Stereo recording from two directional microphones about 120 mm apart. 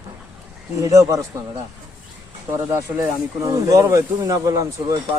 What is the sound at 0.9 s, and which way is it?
Speech, 25° right (ahead or behind).